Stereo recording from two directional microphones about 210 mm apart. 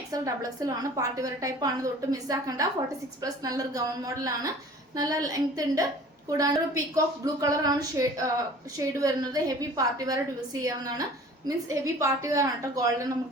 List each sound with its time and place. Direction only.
0.6 s a woman's voice: 15° right (ahead or behind)